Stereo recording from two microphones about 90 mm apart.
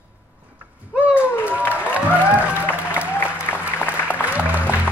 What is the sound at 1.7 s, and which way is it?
Music, 15° right (ahead or behind).